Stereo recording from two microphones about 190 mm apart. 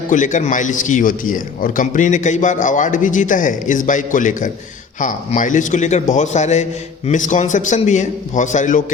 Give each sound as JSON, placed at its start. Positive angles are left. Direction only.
{"t": 0.1, "sound": "a man's voice", "side_deg": 40}